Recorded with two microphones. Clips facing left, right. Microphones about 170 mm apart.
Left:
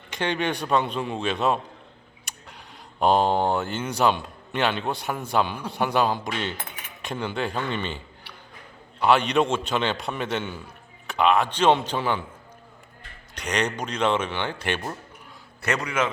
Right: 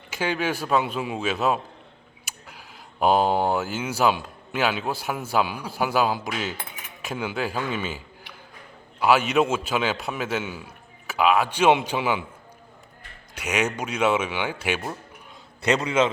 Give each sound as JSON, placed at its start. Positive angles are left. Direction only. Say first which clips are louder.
{"t": 0.1, "sound": "a man's voice", "louder": "even", "side_deg": -5}
{"t": 13.3, "sound": "speech", "louder": "right 1 dB", "side_deg": -5}
{"t": 15.6, "sound": "a man's voice", "louder": "right 4 dB", "side_deg": -20}